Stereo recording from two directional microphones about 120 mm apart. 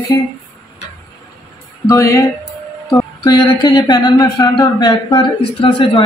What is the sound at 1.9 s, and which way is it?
A woman's voice, 25° left (ahead or behind).